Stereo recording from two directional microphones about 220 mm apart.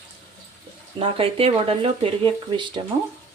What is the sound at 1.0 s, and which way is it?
Speech, 25° right (ahead or behind).